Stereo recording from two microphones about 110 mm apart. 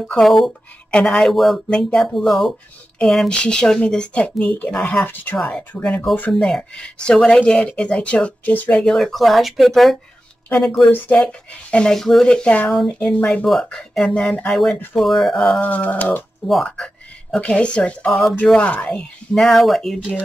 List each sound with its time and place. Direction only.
0.0 s speech: centre (ahead or behind)
5.0 s speech: 20° left (ahead or behind); by 9.9 s centre (ahead or behind)
10.9 s speech: 10° left (ahead or behind)
15.6 s speech: 15° left (ahead or behind)
16.4 s speech: 5° left (ahead or behind)